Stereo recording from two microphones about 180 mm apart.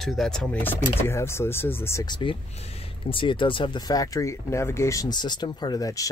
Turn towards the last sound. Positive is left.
turn(degrees=20)  # may be behind; listen again after turning